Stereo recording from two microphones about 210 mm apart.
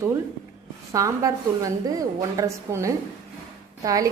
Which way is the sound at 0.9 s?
15° right (ahead or behind).